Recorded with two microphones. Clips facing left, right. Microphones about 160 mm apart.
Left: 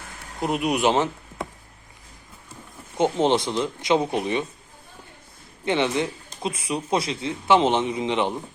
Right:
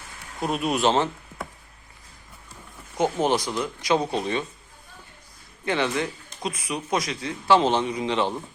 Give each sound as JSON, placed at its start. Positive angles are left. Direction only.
{"t": 0.3, "sound": "speech", "side_deg": 20}
{"t": 3.0, "sound": "speech", "side_deg": 25}
{"t": 5.6, "sound": "speech", "side_deg": 20}